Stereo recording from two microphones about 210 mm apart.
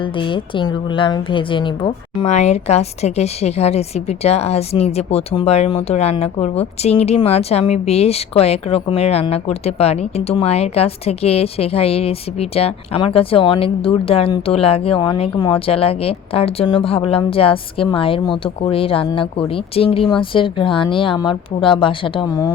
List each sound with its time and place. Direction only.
0.0 s a woman's voice: 25° left (ahead or behind)